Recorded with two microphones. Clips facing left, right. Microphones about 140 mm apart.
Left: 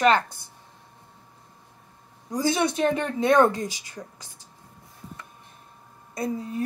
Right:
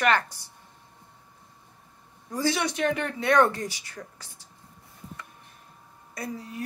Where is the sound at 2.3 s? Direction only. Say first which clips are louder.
Left 3 dB; 20° left (ahead or behind).